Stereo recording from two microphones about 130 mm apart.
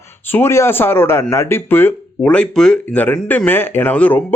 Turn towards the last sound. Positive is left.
turn(degrees=10)  # may be behind; listen again after turning